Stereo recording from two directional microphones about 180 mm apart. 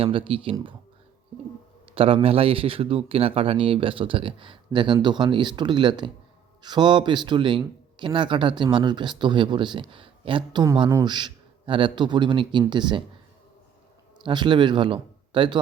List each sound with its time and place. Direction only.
0.0 s a man's voice: 30° right (ahead or behind)
2.0 s a man's voice: 30° right (ahead or behind)
14.3 s a man's voice: 25° right (ahead or behind)